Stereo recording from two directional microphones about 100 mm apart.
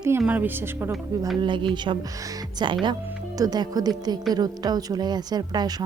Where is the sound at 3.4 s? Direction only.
40° right (ahead or behind).